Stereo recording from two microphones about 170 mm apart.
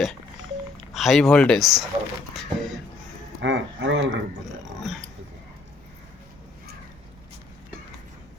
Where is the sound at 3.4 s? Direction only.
90° right.